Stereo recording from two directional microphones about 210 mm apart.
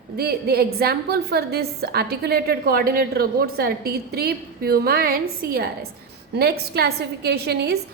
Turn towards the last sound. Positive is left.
turn(degrees=-50)  # may be behind; listen again after turning